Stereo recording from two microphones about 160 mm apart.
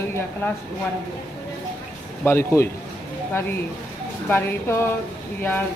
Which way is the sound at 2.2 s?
15° left (ahead or behind).